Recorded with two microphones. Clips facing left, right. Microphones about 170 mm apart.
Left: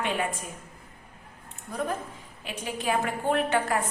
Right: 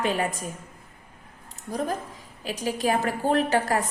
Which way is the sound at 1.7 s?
35° right (ahead or behind).